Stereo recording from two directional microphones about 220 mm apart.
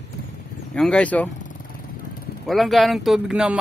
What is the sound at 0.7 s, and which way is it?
Speech, 5° left (ahead or behind).